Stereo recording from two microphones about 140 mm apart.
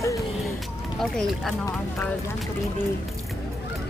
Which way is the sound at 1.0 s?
Centre (ahead or behind).